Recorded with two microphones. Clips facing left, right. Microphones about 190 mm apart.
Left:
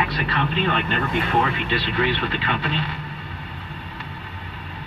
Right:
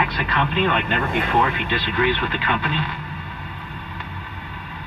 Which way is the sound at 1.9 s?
30° left (ahead or behind).